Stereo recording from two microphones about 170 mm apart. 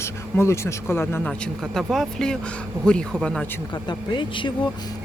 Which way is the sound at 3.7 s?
25° left (ahead or behind).